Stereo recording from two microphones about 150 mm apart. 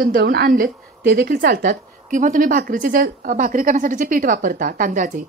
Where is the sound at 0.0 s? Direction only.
85° right.